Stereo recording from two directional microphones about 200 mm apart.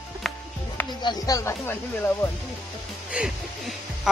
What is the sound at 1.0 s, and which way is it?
Speech, 20° left (ahead or behind).